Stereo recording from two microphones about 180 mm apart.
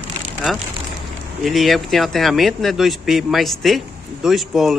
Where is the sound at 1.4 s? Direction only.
Centre (ahead or behind).